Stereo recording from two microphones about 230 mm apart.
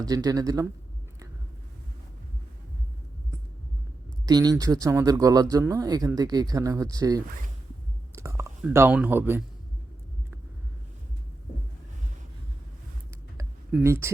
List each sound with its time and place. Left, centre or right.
0.0 s speech: centre
4.3 s speech: centre
13.3 s a sound: centre